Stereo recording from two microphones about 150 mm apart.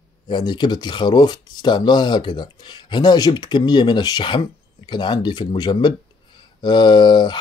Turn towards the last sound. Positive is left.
turn(degrees=30)  # may be behind; listen again after turning